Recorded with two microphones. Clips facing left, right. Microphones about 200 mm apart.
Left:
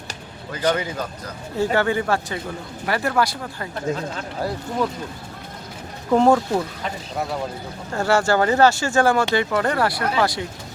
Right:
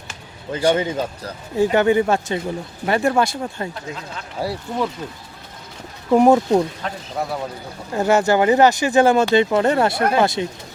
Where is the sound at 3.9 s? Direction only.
35° left (ahead or behind).